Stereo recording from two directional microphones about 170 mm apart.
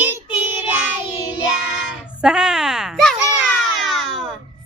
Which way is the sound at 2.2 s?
5° right (ahead or behind).